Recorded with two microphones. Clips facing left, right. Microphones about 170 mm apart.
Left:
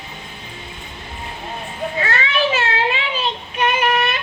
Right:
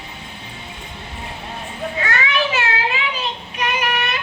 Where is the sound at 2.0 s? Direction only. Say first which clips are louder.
Left 1 dB; 30° left (ahead or behind).